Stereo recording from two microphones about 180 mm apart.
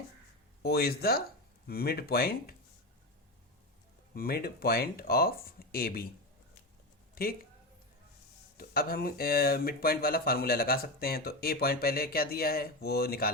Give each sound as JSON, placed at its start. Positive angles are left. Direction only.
{"t": 0.6, "sound": "speech", "side_deg": 60}
{"t": 4.1, "sound": "speech", "side_deg": 60}
{"t": 7.2, "sound": "speech", "side_deg": 55}
{"t": 8.5, "sound": "speech", "side_deg": 55}